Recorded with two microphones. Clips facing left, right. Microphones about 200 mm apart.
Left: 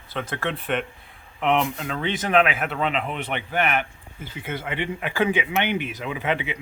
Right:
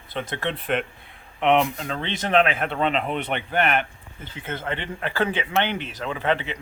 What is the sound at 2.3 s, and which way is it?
Speech, 30° right (ahead or behind).